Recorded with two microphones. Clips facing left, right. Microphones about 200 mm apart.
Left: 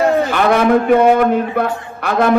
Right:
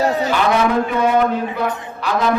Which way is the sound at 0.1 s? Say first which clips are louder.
Left 3 dB; 55° left (ahead or behind).